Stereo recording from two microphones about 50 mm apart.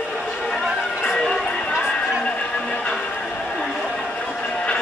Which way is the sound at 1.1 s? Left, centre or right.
Centre.